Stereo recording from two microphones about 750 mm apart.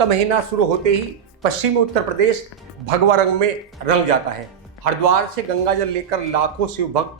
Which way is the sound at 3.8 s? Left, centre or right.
Right.